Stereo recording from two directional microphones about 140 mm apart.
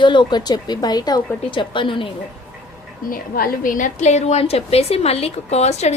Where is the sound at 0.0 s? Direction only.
35° left (ahead or behind).